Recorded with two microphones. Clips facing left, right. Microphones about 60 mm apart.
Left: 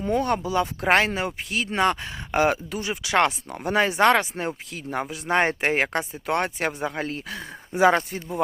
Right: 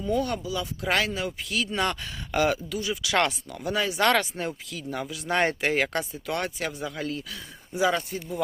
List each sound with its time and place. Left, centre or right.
0.0 s speech: left